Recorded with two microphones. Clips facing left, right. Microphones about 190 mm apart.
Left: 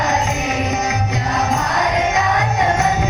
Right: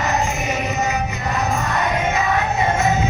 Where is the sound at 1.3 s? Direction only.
80° left.